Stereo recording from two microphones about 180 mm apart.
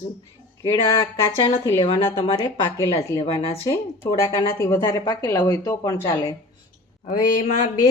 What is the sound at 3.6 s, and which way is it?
A woman's voice, 15° left (ahead or behind).